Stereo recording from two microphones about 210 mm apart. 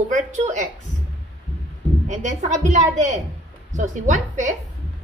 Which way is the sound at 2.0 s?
35° right (ahead or behind).